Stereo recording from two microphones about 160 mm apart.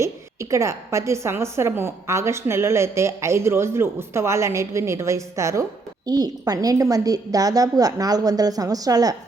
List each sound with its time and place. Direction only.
0.0 s a woman's voice: 20° right (ahead or behind)